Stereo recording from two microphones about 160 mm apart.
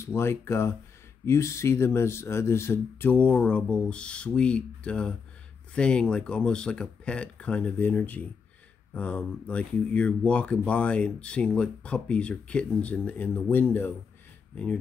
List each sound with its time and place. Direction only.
0.0 s speech: 15° left (ahead or behind)